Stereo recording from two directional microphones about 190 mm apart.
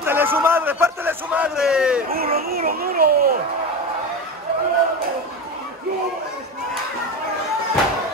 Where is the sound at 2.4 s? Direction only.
50° right (ahead or behind).